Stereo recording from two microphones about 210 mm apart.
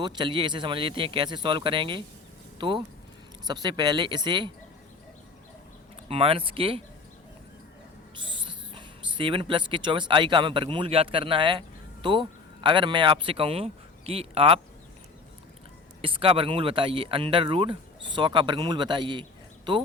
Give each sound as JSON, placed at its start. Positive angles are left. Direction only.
{"t": 0.0, "sound": "speech", "side_deg": -20}
{"t": 6.1, "sound": "speech", "side_deg": -25}
{"t": 8.1, "sound": "speech", "side_deg": -25}
{"t": 12.6, "sound": "speech", "side_deg": -25}
{"t": 16.0, "sound": "speech", "side_deg": -25}